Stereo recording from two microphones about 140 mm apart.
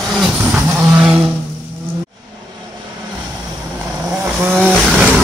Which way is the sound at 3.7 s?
5° right (ahead or behind).